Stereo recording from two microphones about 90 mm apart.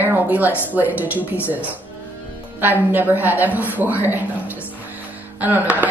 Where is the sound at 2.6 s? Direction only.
20° right (ahead or behind).